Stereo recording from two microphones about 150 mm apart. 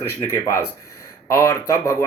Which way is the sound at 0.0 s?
20° left (ahead or behind).